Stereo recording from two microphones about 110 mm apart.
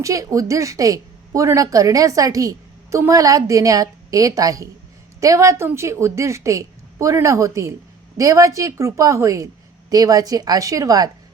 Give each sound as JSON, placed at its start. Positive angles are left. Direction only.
{"t": 0.0, "sound": "a woman's voice", "side_deg": -30}